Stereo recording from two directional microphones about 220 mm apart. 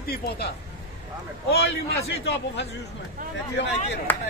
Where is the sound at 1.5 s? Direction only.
45° left (ahead or behind).